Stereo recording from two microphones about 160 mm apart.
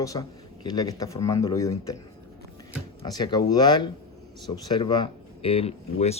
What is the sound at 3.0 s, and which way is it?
Speech, 25° left (ahead or behind).